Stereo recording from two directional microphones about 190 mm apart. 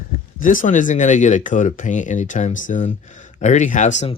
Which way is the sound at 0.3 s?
45° left (ahead or behind).